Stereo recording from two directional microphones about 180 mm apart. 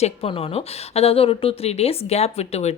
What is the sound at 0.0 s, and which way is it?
A woman's voice, 35° left (ahead or behind).